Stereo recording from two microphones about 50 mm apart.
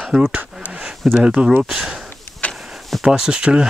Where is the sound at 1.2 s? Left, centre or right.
Right.